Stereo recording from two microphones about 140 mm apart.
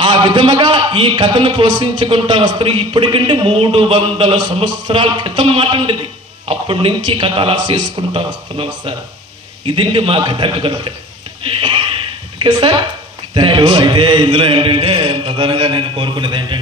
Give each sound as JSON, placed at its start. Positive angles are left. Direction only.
{"t": 0.0, "sound": "a man's voice", "side_deg": -35}
{"t": 12.4, "sound": "a woman's voice", "side_deg": -35}